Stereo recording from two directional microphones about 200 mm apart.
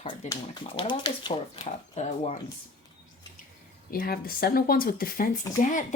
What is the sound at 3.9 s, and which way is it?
Speech, 45° left (ahead or behind).